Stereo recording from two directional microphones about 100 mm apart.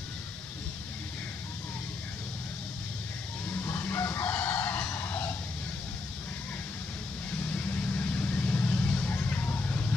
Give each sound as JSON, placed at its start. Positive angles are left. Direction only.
{"t": 3.6, "sound": "chicken", "side_deg": 25}
{"t": 7.5, "sound": "vehicle", "side_deg": 15}